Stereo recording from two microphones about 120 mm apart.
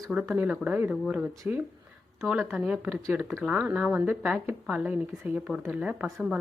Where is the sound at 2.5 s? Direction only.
10° right (ahead or behind).